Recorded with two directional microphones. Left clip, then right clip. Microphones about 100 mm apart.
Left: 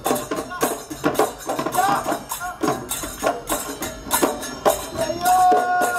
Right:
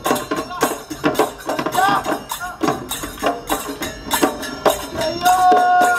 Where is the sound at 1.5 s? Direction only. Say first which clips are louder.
Right 4 dB; 25° right (ahead or behind).